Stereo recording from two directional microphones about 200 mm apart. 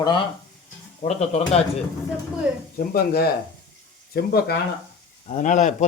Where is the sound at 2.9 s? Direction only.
50° left (ahead or behind).